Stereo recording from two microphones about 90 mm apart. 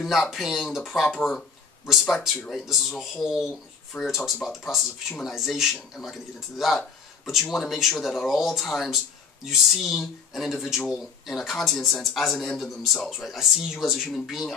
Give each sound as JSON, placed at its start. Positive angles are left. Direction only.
{"t": 0.0, "sound": "speech", "side_deg": 0}
{"t": 3.9, "sound": "speech", "side_deg": 30}
{"t": 4.5, "sound": "speech", "side_deg": -5}